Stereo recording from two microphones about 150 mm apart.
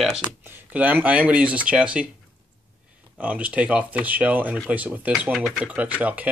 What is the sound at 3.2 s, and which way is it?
Speech, 10° right (ahead or behind).